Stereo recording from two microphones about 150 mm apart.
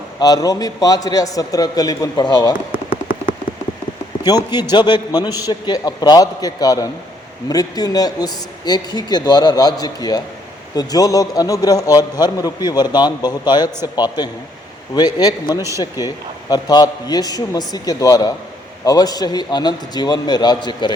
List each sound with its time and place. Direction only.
0.2 s a man's voice: 25° left (ahead or behind)
4.2 s a man's voice: 25° left (ahead or behind)